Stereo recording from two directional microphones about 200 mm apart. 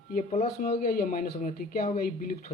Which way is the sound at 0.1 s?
40° left (ahead or behind).